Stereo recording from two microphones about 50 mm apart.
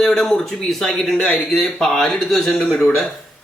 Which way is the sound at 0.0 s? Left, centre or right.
Centre.